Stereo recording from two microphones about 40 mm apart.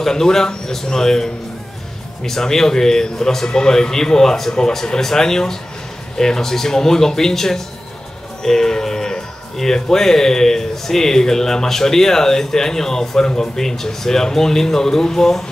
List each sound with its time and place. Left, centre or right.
0.0 s speech: centre